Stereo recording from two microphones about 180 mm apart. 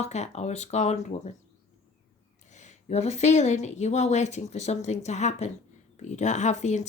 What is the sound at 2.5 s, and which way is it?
Speech, 40° left (ahead or behind).